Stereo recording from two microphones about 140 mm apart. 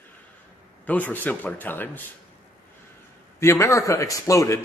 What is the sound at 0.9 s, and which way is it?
Speech, 10° left (ahead or behind).